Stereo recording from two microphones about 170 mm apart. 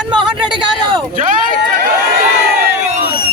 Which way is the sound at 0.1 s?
30° right (ahead or behind).